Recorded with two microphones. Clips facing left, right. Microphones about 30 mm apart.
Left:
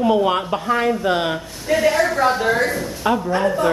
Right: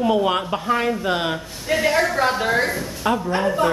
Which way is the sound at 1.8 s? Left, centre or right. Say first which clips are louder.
Left 2 dB; centre.